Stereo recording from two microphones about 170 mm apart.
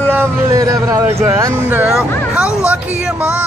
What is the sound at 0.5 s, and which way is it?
Speech, 20° right (ahead or behind).